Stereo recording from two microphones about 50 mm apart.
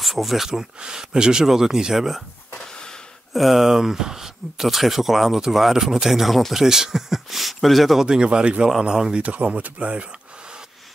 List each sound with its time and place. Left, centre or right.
0.0 s speech: centre
3.3 s speech: centre
8.1 s speech: centre
9.2 s speech: right